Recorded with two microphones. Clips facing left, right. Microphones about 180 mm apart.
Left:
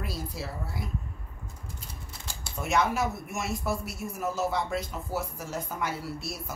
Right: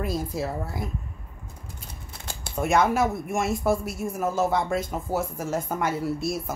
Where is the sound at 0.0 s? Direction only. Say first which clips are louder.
Right 8 dB; 50° right (ahead or behind).